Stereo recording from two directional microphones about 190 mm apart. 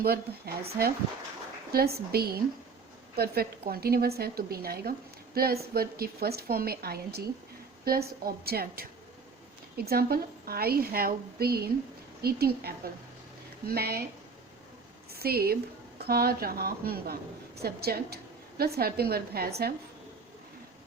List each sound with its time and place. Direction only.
0.0 s a woman's voice: 55° right (ahead or behind)
15.1 s a woman's voice: 55° right (ahead or behind)